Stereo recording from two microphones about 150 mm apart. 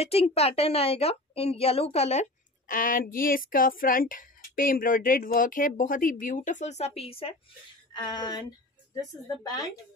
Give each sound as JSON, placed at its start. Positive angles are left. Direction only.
{"t": 0.0, "sound": "a woman's voice", "side_deg": 40}
{"t": 2.7, "sound": "a woman's voice", "side_deg": 65}